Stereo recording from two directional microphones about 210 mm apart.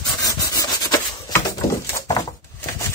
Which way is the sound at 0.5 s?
15° left (ahead or behind).